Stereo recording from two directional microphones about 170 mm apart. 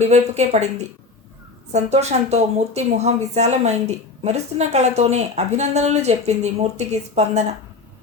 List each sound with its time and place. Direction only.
0.0 s speech: 40° right (ahead or behind)
1.7 s speech: 40° right (ahead or behind)